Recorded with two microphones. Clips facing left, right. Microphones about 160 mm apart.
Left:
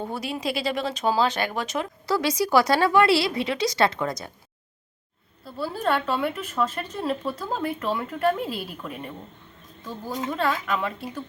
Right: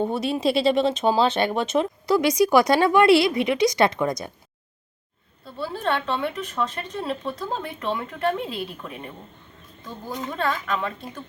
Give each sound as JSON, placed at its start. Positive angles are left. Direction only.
{"t": 0.0, "sound": "speech", "side_deg": -25}
{"t": 5.5, "sound": "a woman's voice", "side_deg": 5}